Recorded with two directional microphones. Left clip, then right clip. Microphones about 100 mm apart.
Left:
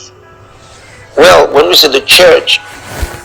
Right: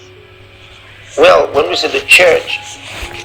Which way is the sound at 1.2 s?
90° left.